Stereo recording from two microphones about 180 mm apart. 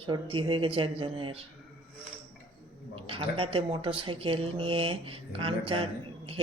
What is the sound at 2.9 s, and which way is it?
Speech, 30° right (ahead or behind).